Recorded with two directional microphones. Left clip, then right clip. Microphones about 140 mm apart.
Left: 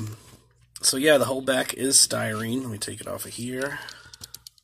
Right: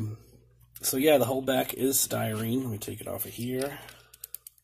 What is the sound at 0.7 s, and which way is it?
Speech, 10° left (ahead or behind).